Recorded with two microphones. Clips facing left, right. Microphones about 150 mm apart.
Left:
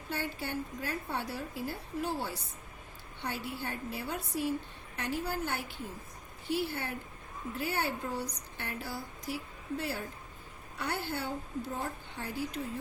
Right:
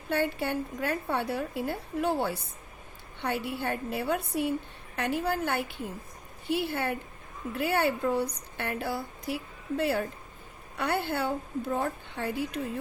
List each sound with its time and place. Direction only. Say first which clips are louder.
0.1 s a woman's voice: right 8 dB; 65° right (ahead or behind)